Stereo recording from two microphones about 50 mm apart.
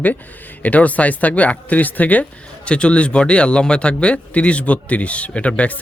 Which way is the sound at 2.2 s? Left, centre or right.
Left.